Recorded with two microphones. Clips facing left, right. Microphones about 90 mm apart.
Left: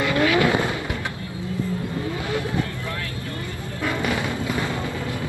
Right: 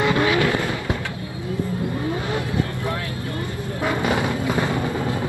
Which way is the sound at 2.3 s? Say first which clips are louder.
Right 1 dB; 20° right (ahead or behind).